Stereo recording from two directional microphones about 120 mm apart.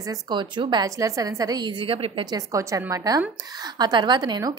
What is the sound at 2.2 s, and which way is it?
A woman's voice, 30° right (ahead or behind).